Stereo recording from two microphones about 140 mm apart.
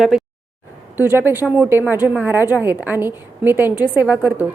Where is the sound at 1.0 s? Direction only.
15° right (ahead or behind).